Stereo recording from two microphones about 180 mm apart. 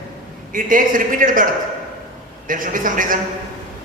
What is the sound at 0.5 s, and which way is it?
Speech, 50° right (ahead or behind).